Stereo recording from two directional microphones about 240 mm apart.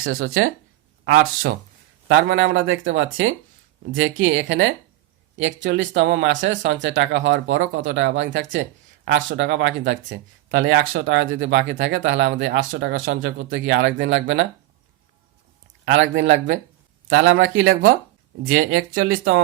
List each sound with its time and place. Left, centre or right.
0.0 s speech: right
15.9 s speech: right